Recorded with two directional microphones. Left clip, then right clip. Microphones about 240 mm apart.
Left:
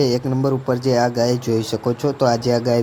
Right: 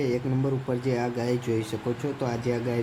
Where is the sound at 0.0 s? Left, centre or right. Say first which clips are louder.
Left 9 dB; left.